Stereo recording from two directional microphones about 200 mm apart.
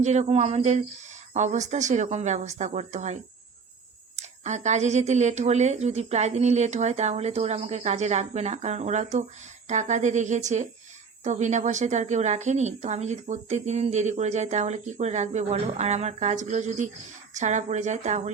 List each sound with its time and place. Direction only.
0.0 s a woman's voice: 35° right (ahead or behind)
4.2 s a woman's voice: 35° right (ahead or behind)